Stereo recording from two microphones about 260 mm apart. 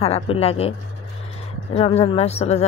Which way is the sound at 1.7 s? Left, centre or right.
Left.